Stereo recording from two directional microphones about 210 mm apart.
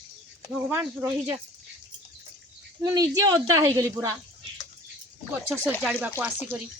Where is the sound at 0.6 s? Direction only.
10° right (ahead or behind).